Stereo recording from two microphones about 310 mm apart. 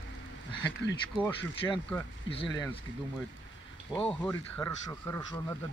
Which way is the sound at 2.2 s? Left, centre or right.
Centre.